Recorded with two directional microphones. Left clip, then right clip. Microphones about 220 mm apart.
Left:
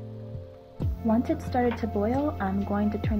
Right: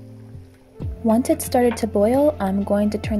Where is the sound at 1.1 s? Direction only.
45° right (ahead or behind).